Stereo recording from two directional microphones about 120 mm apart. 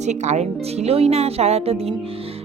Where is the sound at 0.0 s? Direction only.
75° right (ahead or behind); by 1.9 s 55° right (ahead or behind).